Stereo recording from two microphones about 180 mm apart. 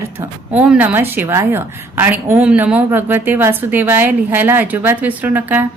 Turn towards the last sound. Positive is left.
turn(degrees=-10)  # may be behind; listen again after turning